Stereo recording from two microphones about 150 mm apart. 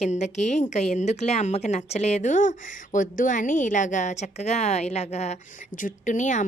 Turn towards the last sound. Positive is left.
turn(degrees=55)  # may be behind; listen again after turning